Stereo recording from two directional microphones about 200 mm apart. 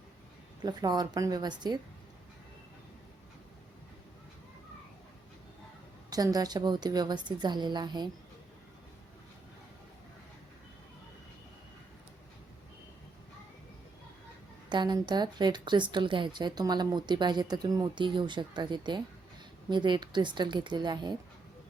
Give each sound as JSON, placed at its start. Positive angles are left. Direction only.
{"t": 0.6, "sound": "a woman's voice", "side_deg": -20}
{"t": 6.1, "sound": "a woman's voice", "side_deg": -20}
{"t": 14.7, "sound": "a woman's voice", "side_deg": -20}